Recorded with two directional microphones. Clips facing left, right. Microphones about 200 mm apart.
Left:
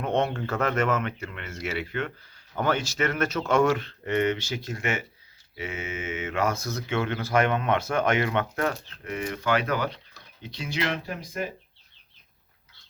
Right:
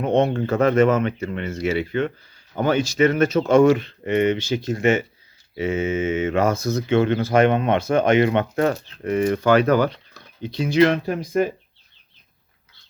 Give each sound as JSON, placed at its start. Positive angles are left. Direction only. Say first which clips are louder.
{"t": 0.0, "sound": "speech", "louder": "right 7 dB", "side_deg": -20}
{"t": 3.3, "sound": "speech", "louder": "right 8 dB", "side_deg": -30}
{"t": 3.6, "sound": "speech", "louder": "right 8 dB", "side_deg": -15}